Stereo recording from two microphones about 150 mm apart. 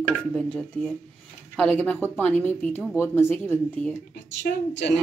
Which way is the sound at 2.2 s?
10° left (ahead or behind).